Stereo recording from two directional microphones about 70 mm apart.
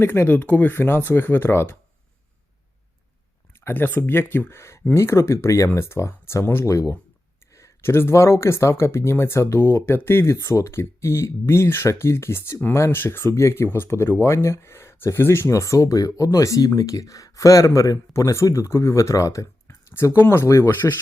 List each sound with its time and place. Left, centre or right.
0.0 s speech: left
3.6 s speech: left
19.6 s a sound: left
20.4 s speech: left